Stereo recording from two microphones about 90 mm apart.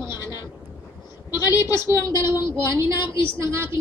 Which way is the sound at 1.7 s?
30° right (ahead or behind).